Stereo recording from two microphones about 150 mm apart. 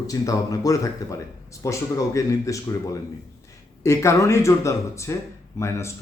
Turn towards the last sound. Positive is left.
turn(degrees=20)  # may be behind; listen again after turning